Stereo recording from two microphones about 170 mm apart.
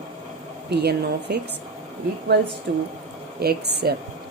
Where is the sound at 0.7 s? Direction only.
70° right (ahead or behind).